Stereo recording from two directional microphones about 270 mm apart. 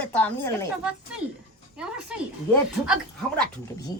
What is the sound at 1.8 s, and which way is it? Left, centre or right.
A woman's voice, centre.